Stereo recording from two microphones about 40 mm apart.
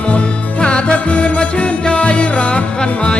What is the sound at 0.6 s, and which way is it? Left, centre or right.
Music, left.